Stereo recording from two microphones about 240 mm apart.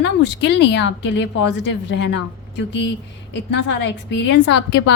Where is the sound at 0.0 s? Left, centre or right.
Left.